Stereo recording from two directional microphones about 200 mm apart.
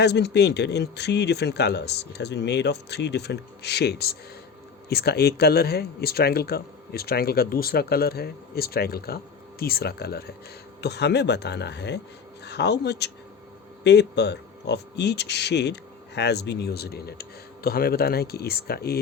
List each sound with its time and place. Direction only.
0.0 s a man's voice: 55° left (ahead or behind)